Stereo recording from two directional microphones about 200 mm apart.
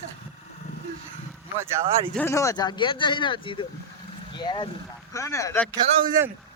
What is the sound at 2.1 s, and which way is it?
Speech, 10° left (ahead or behind).